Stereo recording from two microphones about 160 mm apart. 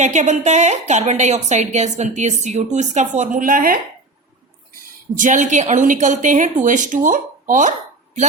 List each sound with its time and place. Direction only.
0.0 s a woman's voice: 50° right (ahead or behind)
5.1 s a woman's voice: 55° right (ahead or behind)